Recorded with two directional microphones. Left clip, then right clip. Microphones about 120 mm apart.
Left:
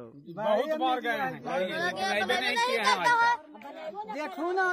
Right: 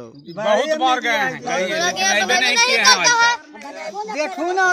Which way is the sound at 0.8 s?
15° left (ahead or behind).